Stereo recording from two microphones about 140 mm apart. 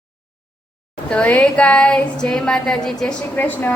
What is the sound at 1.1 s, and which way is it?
A woman's voice, 10° left (ahead or behind).